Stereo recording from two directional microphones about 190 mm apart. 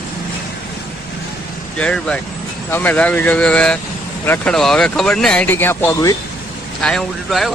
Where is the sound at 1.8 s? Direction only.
5° left (ahead or behind).